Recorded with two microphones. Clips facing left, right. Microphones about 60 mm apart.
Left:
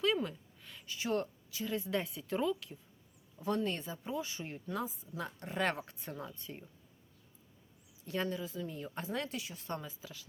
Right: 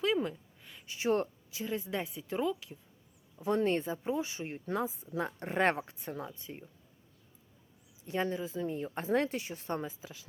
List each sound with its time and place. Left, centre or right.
0.3 s a sound: centre
0.9 s speech: right; by 2.7 s centre
3.3 s speech: right
3.6 s speech: right
6.0 s speech: centre
8.0 s speech: right